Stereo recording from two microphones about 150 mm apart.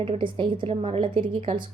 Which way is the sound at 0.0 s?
35° right (ahead or behind).